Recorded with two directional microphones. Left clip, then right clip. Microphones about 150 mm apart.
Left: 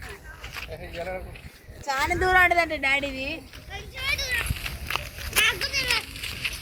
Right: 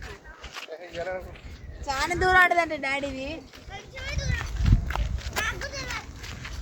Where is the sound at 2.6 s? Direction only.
Centre (ahead or behind).